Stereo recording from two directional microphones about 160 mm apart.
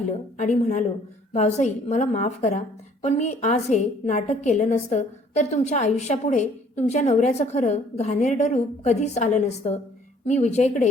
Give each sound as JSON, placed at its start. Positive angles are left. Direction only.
{"t": 0.3, "sound": "a woman's voice", "side_deg": 45}